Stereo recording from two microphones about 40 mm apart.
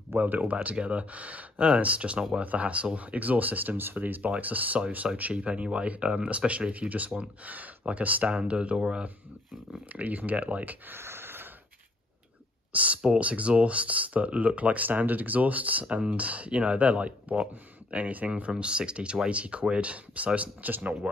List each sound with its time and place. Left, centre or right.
0.2 s speech: right
5.3 s speech: right
8.3 s speech: right
9.9 s speech: right
10.9 s a sound: right
12.7 s speech: right